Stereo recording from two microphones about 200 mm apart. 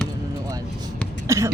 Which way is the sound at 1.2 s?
15° right (ahead or behind).